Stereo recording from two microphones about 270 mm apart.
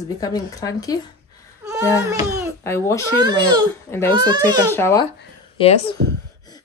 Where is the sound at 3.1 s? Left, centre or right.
Centre.